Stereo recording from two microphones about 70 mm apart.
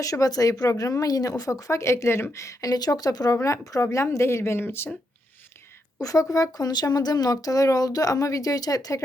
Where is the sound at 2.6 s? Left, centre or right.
Left.